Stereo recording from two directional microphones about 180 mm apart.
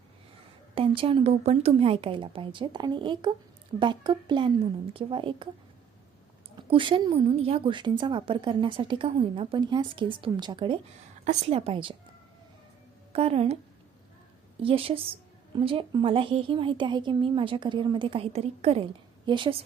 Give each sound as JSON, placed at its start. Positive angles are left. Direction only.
{"t": 0.8, "sound": "a woman's voice", "side_deg": -30}
{"t": 6.6, "sound": "a woman's voice", "side_deg": -25}
{"t": 11.3, "sound": "a woman's voice", "side_deg": -35}
{"t": 13.1, "sound": "a woman's voice", "side_deg": -35}
{"t": 14.6, "sound": "a woman's voice", "side_deg": -30}